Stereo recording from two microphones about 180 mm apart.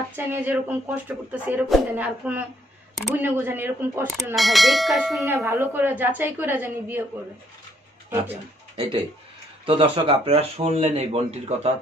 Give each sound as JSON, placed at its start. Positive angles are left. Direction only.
{"t": 0.1, "sound": "speech", "side_deg": -10}
{"t": 4.4, "sound": "speech", "side_deg": 0}
{"t": 5.2, "sound": "speech", "side_deg": -15}
{"t": 8.7, "sound": "speech", "side_deg": -30}